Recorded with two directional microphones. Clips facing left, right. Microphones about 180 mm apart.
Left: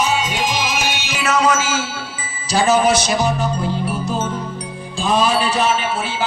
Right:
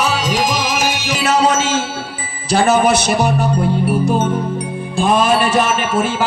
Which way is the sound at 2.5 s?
60° right (ahead or behind).